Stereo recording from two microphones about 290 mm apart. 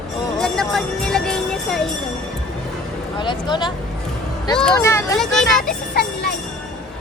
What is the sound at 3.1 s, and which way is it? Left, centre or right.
A child's voice, centre.